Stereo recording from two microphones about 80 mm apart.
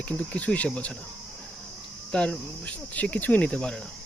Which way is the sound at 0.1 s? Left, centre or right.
Centre.